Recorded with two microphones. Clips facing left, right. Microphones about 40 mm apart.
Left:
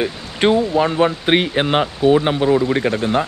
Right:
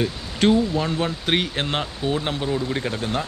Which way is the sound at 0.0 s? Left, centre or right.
Left.